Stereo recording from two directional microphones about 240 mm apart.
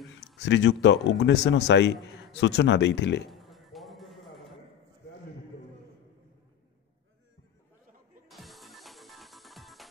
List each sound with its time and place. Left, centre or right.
0.4 s speech: left
3.3 s music: centre
8.3 s music: centre